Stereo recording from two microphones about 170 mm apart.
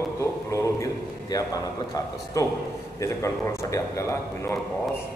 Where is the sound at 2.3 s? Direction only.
20° left (ahead or behind).